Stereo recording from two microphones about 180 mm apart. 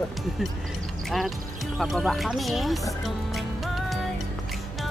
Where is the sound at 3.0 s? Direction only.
Centre (ahead or behind).